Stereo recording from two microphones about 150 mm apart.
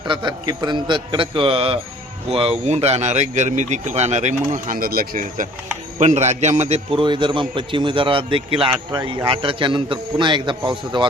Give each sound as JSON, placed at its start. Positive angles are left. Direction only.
{"t": 0.1, "sound": "a man's voice", "side_deg": -30}
{"t": 6.0, "sound": "a man's voice", "side_deg": -50}